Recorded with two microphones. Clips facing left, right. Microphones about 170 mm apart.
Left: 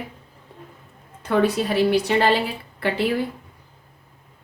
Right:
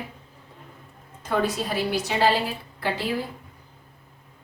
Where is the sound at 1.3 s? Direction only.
60° left (ahead or behind).